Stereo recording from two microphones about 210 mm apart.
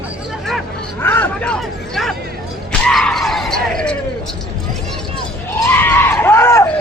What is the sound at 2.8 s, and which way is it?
Music, 5° left (ahead or behind).